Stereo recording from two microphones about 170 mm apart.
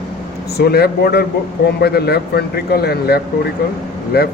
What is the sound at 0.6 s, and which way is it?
Speech, 70° left (ahead or behind).